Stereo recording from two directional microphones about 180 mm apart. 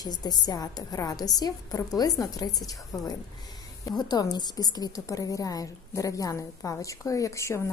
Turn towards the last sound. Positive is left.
turn(degrees=15)  # may be behind; listen again after turning